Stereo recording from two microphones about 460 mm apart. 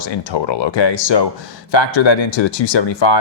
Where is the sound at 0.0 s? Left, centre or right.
Left.